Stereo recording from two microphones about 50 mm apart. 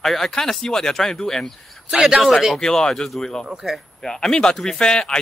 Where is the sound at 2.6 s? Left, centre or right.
Centre.